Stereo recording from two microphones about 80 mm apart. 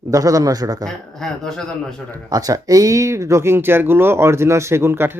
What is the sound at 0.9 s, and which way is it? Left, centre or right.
Speech, centre.